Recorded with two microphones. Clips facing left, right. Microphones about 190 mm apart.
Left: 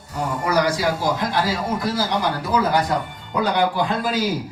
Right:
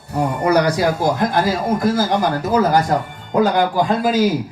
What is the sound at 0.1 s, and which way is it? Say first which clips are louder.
A man's voice: right 6 dB; 60° right (ahead or behind).